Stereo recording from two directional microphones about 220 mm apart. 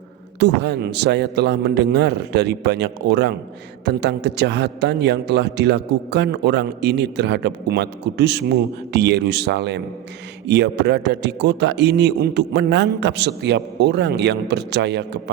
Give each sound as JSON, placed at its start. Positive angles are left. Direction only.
{"t": 0.3, "sound": "a man's voice", "side_deg": -50}